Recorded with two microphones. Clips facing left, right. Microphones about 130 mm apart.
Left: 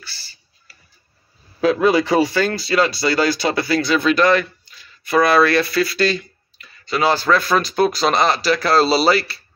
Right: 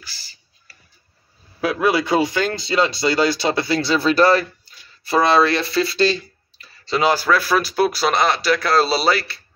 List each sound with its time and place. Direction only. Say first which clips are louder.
1.6 s speech: left 4 dB; 10° right (ahead or behind); by 7.1 s 25° right (ahead or behind)
7.1 s speech: left 1 dB; 10° right (ahead or behind)